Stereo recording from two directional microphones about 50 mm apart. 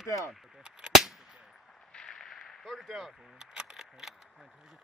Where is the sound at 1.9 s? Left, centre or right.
Centre.